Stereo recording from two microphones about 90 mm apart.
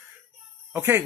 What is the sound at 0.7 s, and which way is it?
Speech, 25° right (ahead or behind).